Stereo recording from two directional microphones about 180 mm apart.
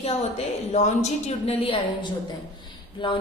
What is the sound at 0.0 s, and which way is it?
A woman's voice, 35° left (ahead or behind).